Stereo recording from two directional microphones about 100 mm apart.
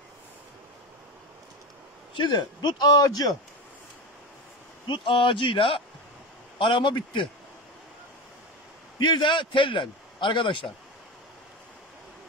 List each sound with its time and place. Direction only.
2.1 s speech: 50° left (ahead or behind)
4.8 s a man's voice: 55° left (ahead or behind)
9.0 s a man's voice: 50° left (ahead or behind)